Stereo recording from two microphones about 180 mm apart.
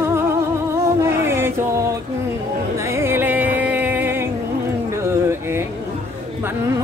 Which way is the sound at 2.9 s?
15° right (ahead or behind).